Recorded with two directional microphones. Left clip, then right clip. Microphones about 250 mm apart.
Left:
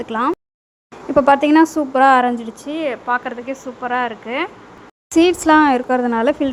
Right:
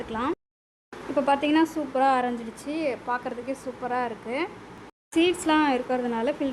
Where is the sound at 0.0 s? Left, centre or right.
Left.